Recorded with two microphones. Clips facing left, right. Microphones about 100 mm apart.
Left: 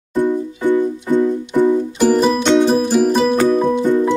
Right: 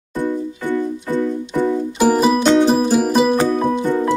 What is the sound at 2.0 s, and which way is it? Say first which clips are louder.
Music: even; 5° right (ahead or behind).